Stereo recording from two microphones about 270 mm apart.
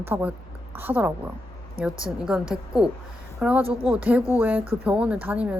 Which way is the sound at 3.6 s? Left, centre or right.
Centre.